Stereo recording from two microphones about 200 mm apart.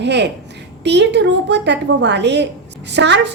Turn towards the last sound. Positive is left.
turn(degrees=-60)  # may be behind; listen again after turning